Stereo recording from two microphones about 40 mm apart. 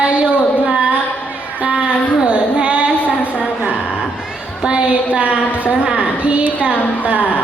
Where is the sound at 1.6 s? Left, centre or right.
Right.